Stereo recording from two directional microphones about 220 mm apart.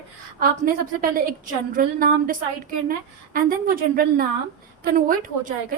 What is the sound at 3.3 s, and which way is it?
A woman's voice, 40° right (ahead or behind).